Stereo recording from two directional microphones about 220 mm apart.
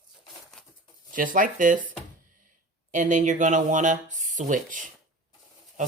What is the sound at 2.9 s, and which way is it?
Speech, 35° right (ahead or behind).